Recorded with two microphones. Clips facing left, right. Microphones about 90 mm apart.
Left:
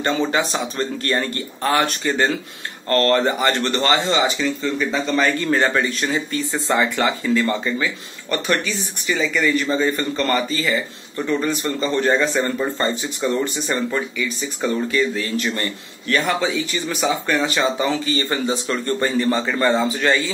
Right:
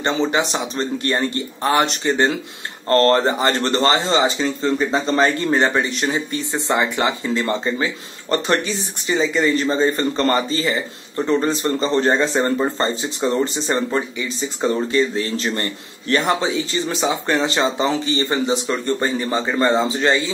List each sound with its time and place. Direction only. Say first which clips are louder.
0.0 s speech: right 1 dB; 20° right (ahead or behind)